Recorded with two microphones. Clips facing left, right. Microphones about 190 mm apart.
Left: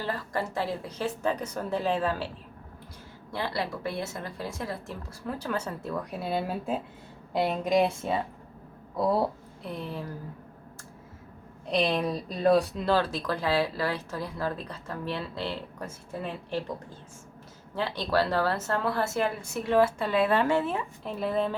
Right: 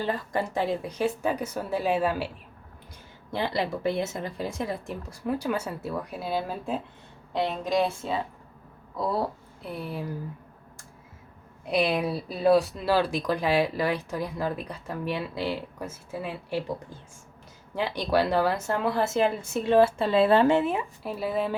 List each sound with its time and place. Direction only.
0.0 s speech: 20° right (ahead or behind)
3.3 s speech: 20° right (ahead or behind); by 6.8 s centre (ahead or behind)
9.6 s speech: 5° right (ahead or behind)
11.6 s speech: 10° right (ahead or behind)
17.7 s speech: 15° right (ahead or behind)